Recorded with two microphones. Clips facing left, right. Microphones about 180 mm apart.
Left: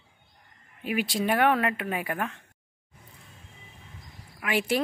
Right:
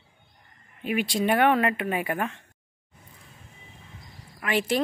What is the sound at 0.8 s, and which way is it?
Speech, 5° left (ahead or behind).